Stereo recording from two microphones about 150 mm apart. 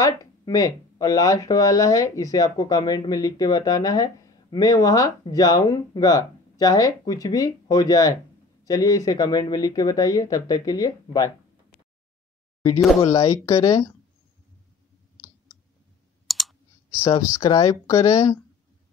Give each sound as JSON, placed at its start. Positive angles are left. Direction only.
{"t": 0.0, "sound": "speech", "side_deg": 25}
{"t": 13.1, "sound": "speech", "side_deg": 25}
{"t": 16.3, "sound": "clicking", "side_deg": 0}
{"t": 17.0, "sound": "speech", "side_deg": 20}